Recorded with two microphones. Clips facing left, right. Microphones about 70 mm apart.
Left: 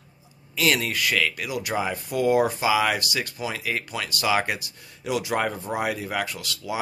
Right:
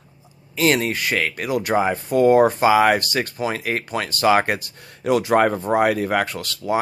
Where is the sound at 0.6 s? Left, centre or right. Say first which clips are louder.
Right 4 dB; right.